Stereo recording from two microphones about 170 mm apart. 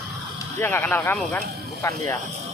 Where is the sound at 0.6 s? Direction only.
15° left (ahead or behind).